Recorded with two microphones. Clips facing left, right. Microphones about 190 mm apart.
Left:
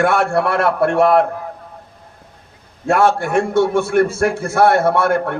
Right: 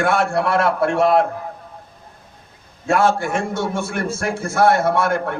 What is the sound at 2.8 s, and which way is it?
A man's voice, 60° left (ahead or behind).